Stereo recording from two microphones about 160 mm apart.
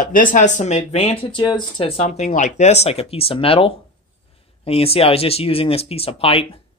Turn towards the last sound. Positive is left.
turn(degrees=35)  # may be behind; listen again after turning